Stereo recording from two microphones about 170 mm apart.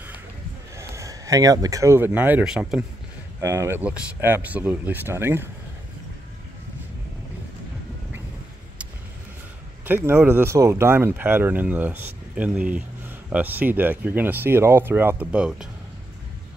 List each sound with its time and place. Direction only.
0.7 s speech: 20° right (ahead or behind)
3.3 s speech: 15° right (ahead or behind)
9.8 s speech: 15° right (ahead or behind)